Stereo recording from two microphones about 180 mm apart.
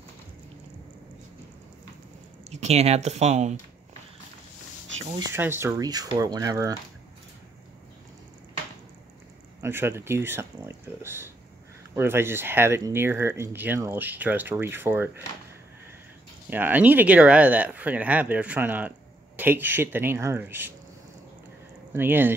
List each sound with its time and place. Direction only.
2.5 s speech: 40° right (ahead or behind)
5.1 s speech: 15° right (ahead or behind)
9.6 s speech: 15° right (ahead or behind)
16.4 s speech: 10° right (ahead or behind)
21.9 s speech: 10° right (ahead or behind)